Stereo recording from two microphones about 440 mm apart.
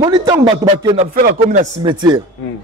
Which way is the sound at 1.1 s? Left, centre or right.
Centre.